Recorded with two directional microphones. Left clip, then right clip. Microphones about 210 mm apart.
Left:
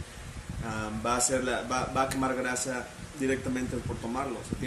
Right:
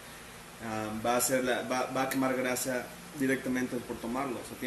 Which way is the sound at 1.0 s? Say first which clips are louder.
Left 1 dB; 15° left (ahead or behind).